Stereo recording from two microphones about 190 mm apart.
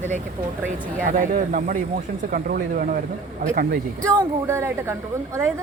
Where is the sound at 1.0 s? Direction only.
45° right (ahead or behind).